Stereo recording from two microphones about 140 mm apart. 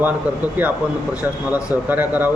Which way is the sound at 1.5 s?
10° right (ahead or behind).